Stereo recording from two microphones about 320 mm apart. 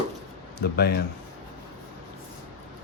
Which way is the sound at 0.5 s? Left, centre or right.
Left.